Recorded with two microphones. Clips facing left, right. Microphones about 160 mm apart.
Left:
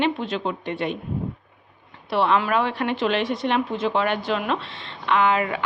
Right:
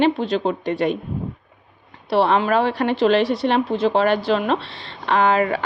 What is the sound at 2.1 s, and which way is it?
A woman's voice, 35° right (ahead or behind).